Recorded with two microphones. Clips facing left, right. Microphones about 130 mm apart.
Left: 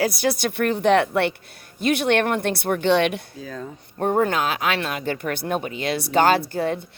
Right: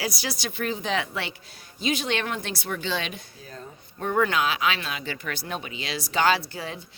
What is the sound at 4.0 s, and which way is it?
Speech, 45° left (ahead or behind).